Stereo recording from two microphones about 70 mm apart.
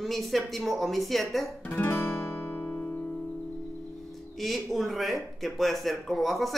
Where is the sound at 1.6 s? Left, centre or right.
Left.